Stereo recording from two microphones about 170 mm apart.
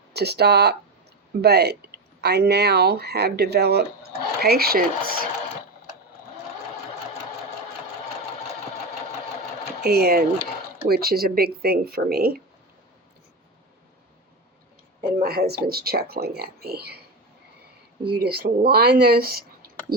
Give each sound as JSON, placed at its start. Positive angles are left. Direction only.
{"t": 0.1, "sound": "speech", "side_deg": -75}
{"t": 9.8, "sound": "speech", "side_deg": -70}
{"t": 15.2, "sound": "speech", "side_deg": -70}
{"t": 18.2, "sound": "speech", "side_deg": -65}